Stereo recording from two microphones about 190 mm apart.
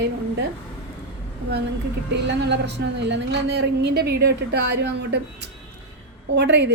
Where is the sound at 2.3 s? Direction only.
65° right (ahead or behind).